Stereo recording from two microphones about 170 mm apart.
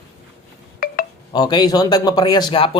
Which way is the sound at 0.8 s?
60° left (ahead or behind).